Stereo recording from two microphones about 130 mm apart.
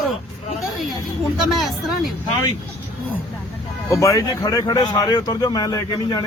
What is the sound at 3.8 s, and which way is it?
Speech, 25° left (ahead or behind).